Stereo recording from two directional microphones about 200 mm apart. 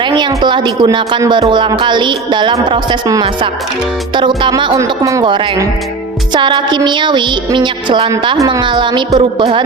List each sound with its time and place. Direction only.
0.0 s a woman's voice: 20° right (ahead or behind)